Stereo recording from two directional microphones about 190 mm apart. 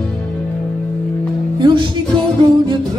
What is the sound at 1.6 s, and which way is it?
Music, 25° right (ahead or behind).